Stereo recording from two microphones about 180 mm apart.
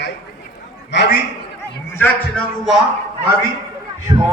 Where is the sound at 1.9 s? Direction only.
10° left (ahead or behind).